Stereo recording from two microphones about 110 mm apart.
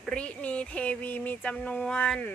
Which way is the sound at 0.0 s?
10° left (ahead or behind).